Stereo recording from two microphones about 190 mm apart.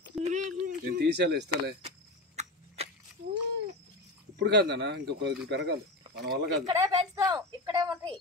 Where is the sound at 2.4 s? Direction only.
35° right (ahead or behind).